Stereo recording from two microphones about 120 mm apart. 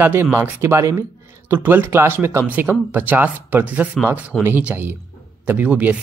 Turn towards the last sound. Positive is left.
turn(degrees=-15)  # may be behind; listen again after turning